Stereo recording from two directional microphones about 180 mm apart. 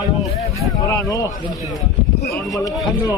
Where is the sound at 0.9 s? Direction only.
20° left (ahead or behind).